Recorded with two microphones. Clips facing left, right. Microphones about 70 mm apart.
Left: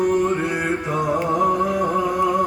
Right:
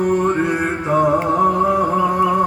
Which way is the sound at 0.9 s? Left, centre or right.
Right.